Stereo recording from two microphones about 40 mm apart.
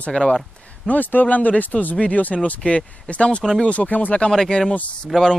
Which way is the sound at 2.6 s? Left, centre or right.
Left.